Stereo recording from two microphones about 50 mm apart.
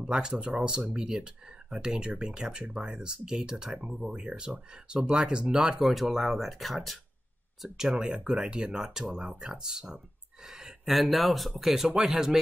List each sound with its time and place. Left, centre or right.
0.0 s speech: centre
7.6 s speech: centre
10.4 s a sound: centre
10.9 s speech: centre